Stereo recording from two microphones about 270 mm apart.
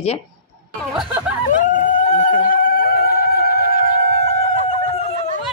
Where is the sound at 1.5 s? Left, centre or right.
Left.